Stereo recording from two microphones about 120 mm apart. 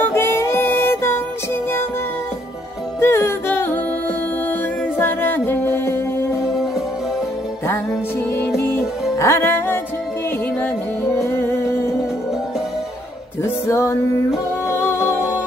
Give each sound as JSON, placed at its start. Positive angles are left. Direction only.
{"t": 0.0, "sound": "music", "side_deg": 20}
{"t": 3.0, "sound": "music", "side_deg": 20}
{"t": 8.5, "sound": "music", "side_deg": 20}
{"t": 11.1, "sound": "music", "side_deg": 20}
{"t": 13.4, "sound": "music", "side_deg": 25}